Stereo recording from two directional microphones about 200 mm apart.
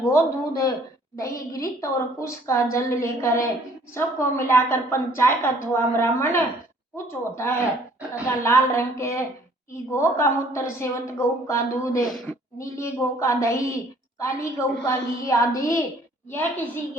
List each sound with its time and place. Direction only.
0.0 s a woman's voice: 15° left (ahead or behind)
12.0 s a woman's voice: centre (ahead or behind)
12.5 s a woman's voice: 15° left (ahead or behind)